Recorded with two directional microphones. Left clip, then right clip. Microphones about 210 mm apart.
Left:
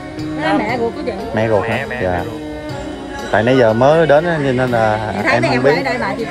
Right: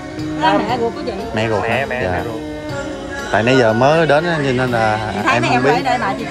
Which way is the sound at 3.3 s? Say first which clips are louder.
Left 1 dB; 10° right (ahead or behind).